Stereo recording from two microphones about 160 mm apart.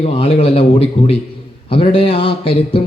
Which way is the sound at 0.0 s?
40° left (ahead or behind).